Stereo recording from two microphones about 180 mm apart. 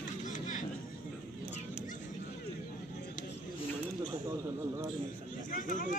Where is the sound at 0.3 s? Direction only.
45° left (ahead or behind).